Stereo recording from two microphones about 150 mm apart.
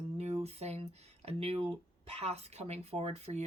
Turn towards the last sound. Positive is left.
turn(degrees=-45)  # may be behind; listen again after turning